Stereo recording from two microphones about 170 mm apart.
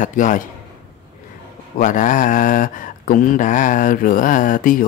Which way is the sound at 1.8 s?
50° left (ahead or behind).